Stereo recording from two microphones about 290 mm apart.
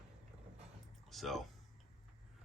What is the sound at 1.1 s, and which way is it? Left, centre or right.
Speech, centre.